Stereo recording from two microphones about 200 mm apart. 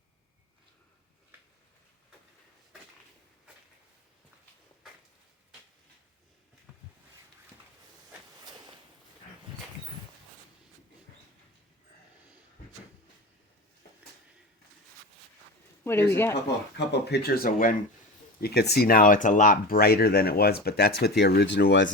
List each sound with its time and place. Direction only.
8.4 s a sound: 20° right (ahead or behind)
15.8 s speech: 10° left (ahead or behind)
16.3 s speech: 55° left (ahead or behind)